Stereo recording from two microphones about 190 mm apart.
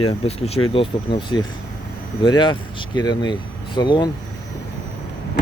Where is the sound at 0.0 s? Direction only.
30° left (ahead or behind).